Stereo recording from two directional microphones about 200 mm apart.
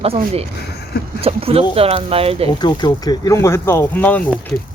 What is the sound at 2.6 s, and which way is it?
Speech, 20° left (ahead or behind).